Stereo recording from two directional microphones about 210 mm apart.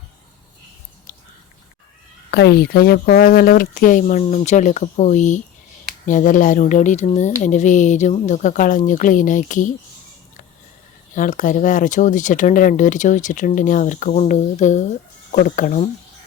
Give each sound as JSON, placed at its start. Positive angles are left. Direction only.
{"t": 2.3, "sound": "speech", "side_deg": 50}
{"t": 11.1, "sound": "speech", "side_deg": 40}